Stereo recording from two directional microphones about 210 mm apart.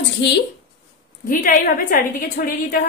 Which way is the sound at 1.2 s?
40° left (ahead or behind).